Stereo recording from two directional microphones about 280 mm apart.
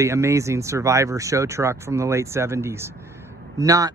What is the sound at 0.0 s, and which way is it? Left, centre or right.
Speech, centre.